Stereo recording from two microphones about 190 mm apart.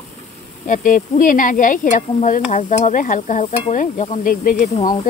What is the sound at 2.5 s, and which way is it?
Sizzle, 40° left (ahead or behind).